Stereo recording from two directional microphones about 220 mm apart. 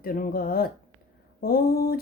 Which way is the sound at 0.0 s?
40° left (ahead or behind).